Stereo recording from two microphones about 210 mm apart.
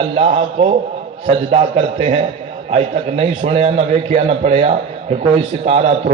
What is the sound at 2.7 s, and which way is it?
A man's voice, 30° right (ahead or behind).